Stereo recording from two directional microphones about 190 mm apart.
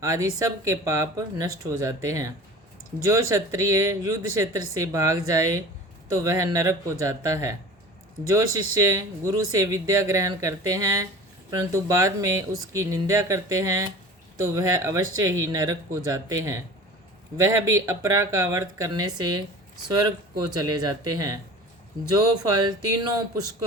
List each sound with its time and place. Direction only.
0.0 s speech: 15° right (ahead or behind)
20.5 s speech: 20° right (ahead or behind)